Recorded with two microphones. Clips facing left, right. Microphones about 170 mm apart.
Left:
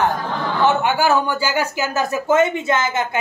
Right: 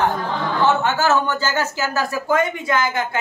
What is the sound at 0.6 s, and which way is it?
A man's voice, 15° left (ahead or behind).